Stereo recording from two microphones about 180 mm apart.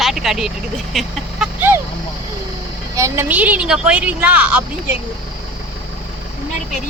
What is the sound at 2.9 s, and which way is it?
A woman's voice, 15° right (ahead or behind).